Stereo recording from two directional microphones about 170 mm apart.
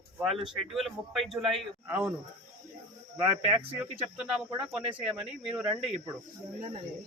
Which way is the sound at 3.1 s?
10° right (ahead or behind).